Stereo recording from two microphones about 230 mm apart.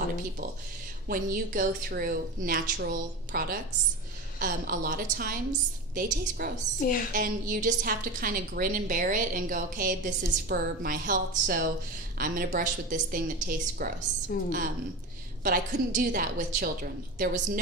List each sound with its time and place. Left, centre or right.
1.0 s a woman's voice: right
14.3 s a woman's voice: left
15.4 s a woman's voice: right